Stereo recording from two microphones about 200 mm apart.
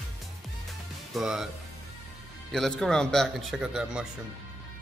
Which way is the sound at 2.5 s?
Centre (ahead or behind).